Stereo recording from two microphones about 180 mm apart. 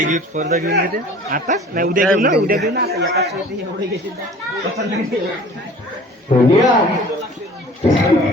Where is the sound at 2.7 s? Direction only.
65° right (ahead or behind).